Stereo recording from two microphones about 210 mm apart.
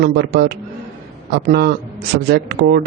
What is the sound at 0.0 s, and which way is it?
A man's voice, 50° right (ahead or behind).